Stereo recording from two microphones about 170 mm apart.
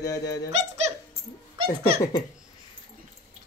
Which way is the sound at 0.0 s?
20° left (ahead or behind).